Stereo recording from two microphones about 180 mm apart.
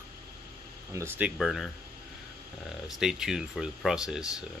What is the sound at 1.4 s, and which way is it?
Speech, centre (ahead or behind).